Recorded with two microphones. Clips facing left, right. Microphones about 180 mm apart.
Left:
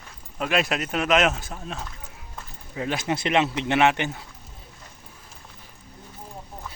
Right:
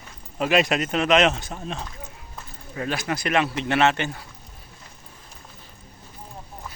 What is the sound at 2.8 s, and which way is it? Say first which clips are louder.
Speech: left 1 dB; 20° left (ahead or behind).